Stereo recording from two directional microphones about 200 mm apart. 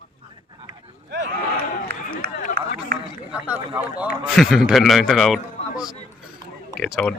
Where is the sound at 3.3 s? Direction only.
5° right (ahead or behind).